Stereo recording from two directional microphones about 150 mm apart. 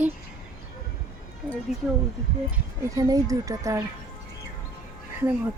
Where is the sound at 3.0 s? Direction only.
20° right (ahead or behind).